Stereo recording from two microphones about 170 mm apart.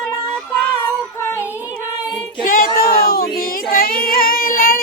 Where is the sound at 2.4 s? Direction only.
55° left (ahead or behind).